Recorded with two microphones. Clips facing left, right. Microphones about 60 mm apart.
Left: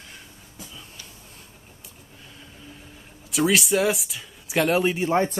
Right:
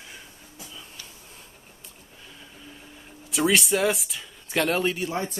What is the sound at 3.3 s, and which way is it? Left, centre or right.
Speech, centre.